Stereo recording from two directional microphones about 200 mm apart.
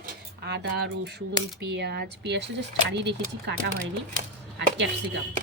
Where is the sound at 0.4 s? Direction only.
55° right (ahead or behind).